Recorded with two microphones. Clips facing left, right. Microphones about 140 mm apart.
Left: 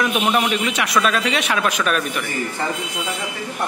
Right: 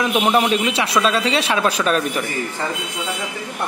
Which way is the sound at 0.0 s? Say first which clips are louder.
Right 2 dB; 25° right (ahead or behind).